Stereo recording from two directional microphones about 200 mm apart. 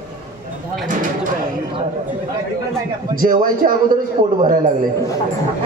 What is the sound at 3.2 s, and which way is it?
Speech, 45° right (ahead or behind).